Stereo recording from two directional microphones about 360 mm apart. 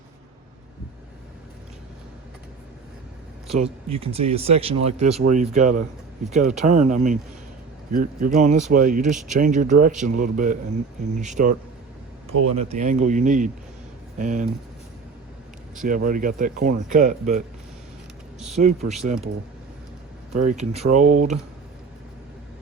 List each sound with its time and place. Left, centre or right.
3.6 s speech: centre
12.3 s speech: right
12.5 s speech: centre
15.8 s speech: right
18.5 s speech: centre
20.4 s speech: centre